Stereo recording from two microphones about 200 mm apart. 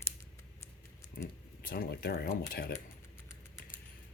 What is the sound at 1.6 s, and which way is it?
Speech, 50° left (ahead or behind).